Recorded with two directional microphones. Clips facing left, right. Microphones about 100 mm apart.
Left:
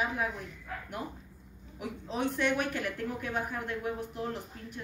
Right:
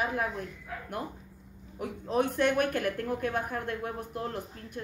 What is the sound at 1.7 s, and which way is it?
Speech, 50° right (ahead or behind).